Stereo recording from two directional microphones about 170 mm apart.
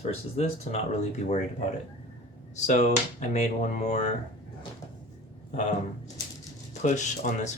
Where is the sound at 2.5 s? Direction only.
45° left (ahead or behind).